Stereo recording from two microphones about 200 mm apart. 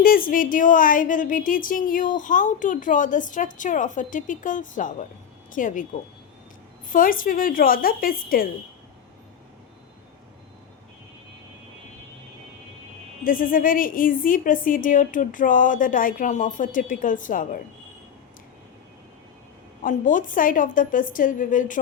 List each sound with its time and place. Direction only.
0.0 s a woman's voice: 45° left (ahead or behind)
6.9 s a woman's voice: 45° left (ahead or behind)
13.2 s a woman's voice: 45° left (ahead or behind)
19.8 s a woman's voice: 40° left (ahead or behind)